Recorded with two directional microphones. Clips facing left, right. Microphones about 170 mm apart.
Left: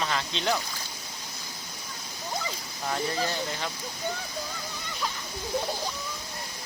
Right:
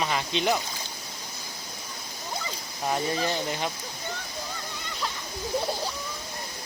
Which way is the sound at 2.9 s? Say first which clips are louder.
Right 2 dB; 20° right (ahead or behind).